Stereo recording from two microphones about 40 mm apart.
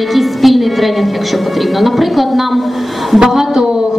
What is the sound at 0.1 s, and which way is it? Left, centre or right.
Music, centre.